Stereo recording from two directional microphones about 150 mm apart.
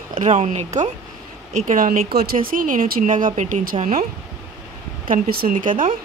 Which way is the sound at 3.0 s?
55° right (ahead or behind).